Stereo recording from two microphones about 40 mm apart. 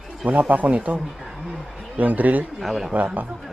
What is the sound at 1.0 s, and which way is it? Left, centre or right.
Speech, centre.